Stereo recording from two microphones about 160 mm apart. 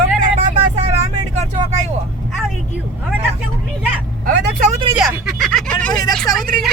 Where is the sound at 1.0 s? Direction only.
45° right (ahead or behind).